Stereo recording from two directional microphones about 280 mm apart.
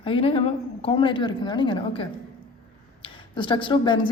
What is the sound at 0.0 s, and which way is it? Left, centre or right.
A woman's voice, centre.